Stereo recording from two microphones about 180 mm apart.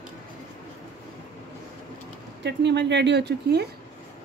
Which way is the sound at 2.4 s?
75° right (ahead or behind).